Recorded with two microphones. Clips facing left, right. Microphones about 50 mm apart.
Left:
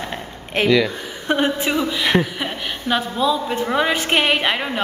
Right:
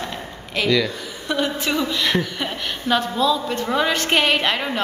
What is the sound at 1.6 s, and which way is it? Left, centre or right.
A woman's voice, centre.